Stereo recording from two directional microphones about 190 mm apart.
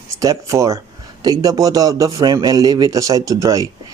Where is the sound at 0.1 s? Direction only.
15° right (ahead or behind).